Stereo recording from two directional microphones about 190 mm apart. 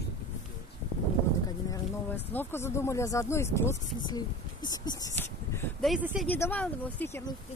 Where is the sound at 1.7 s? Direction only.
10° left (ahead or behind).